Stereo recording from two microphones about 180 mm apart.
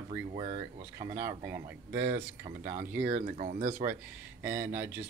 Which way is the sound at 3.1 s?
45° right (ahead or behind).